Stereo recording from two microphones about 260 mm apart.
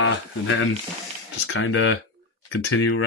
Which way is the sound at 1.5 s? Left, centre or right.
Left.